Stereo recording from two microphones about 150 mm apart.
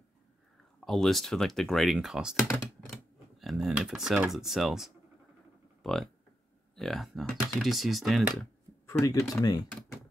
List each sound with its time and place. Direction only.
0.8 s speech: centre (ahead or behind)
2.9 s typing: centre (ahead or behind)
4.3 s speech: centre (ahead or behind)
5.8 s a sound: centre (ahead or behind)
6.7 s speech: centre (ahead or behind)
8.8 s speech: 20° left (ahead or behind)